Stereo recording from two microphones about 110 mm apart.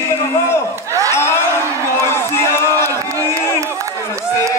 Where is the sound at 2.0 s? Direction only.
25° left (ahead or behind).